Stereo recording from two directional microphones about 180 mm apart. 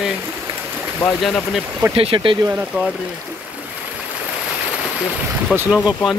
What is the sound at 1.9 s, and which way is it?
Speech, 30° right (ahead or behind).